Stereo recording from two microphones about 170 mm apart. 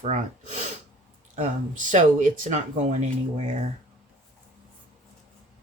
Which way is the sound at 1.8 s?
50° right (ahead or behind).